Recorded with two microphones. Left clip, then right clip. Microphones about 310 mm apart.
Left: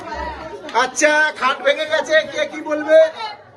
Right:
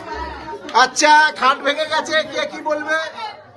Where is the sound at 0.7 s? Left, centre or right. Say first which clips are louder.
Right 3 dB; centre.